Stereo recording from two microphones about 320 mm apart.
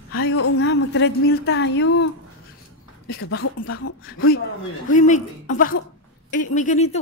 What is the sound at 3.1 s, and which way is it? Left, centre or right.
A woman's voice, left.